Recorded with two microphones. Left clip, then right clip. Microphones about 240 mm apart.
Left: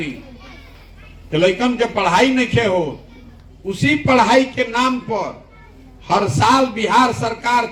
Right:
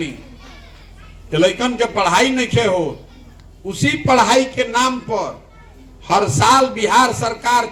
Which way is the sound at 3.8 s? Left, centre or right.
Right.